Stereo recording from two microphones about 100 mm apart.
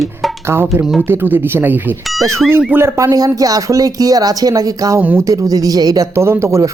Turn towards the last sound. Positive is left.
turn(degrees=-25)  # may be behind; listen again after turning